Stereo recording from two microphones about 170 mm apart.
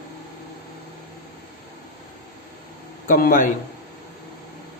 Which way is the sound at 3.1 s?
55° left (ahead or behind).